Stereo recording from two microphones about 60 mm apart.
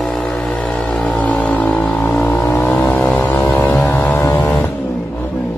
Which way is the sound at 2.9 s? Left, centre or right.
Left.